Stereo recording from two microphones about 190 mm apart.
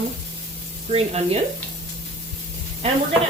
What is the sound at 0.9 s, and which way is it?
Speech, 35° right (ahead or behind).